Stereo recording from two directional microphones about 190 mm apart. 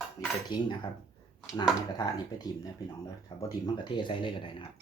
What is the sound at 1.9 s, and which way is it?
Speech, 20° left (ahead or behind).